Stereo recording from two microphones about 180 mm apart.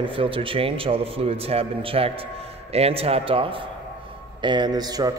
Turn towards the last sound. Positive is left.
turn(degrees=-20)  # may be behind; listen again after turning